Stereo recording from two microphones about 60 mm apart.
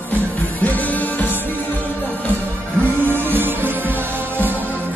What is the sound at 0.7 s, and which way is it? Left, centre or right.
Music, left.